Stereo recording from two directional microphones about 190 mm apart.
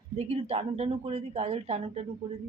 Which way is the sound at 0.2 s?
35° right (ahead or behind).